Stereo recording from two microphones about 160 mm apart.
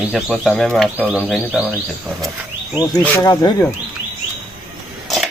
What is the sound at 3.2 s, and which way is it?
Speech, 25° left (ahead or behind).